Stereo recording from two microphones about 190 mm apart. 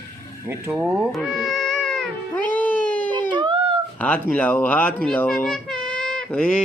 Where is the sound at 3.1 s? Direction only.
25° right (ahead or behind).